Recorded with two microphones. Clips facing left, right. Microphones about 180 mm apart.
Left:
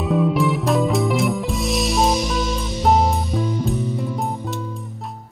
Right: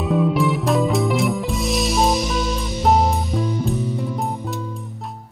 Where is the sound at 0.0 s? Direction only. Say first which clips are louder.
Even; centre (ahead or behind).